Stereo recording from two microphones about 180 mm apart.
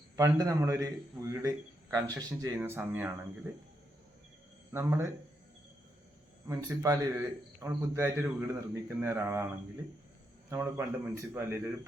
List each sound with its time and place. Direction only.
0.2 s a man's voice: 15° right (ahead or behind)
4.7 s a man's voice: 15° right (ahead or behind)
6.5 s a man's voice: 15° right (ahead or behind)
10.5 s a man's voice: 15° right (ahead or behind)